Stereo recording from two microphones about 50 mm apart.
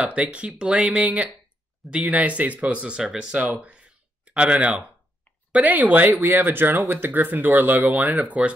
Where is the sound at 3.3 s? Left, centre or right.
Right.